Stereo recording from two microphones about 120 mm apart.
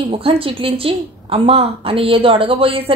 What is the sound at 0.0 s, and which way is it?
A woman's voice, 50° right (ahead or behind).